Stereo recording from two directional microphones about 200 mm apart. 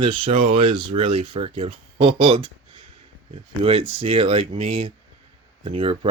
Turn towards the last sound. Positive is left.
turn(degrees=-30)  # may be behind; listen again after turning